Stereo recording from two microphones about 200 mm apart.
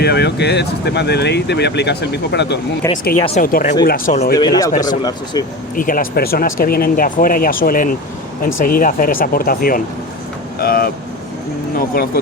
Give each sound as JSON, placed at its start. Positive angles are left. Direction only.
{"t": 0.0, "sound": "speech", "side_deg": 55}
{"t": 4.4, "sound": "speech", "side_deg": 20}
{"t": 4.7, "sound": "speech", "side_deg": 40}
{"t": 5.0, "sound": "speech", "side_deg": 20}
{"t": 5.7, "sound": "speech", "side_deg": 45}